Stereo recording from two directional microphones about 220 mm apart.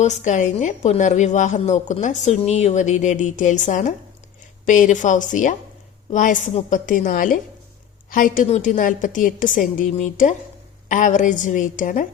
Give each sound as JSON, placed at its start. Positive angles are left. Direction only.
{"t": 0.0, "sound": "a woman's voice", "side_deg": 35}